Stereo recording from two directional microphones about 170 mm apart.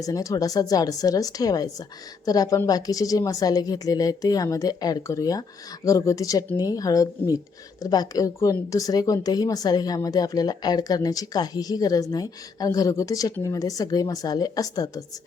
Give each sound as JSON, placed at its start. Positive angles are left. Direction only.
{"t": 0.0, "sound": "a woman's voice", "side_deg": 20}